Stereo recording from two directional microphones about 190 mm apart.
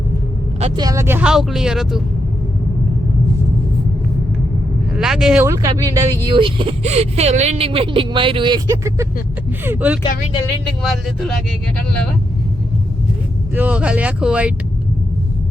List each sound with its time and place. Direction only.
0.8 s speech: 15° right (ahead or behind)
4.9 s speech: centre (ahead or behind)
13.6 s speech: 5° right (ahead or behind)